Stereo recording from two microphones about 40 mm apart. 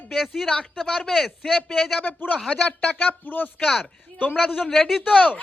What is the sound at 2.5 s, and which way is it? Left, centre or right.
Speech, left.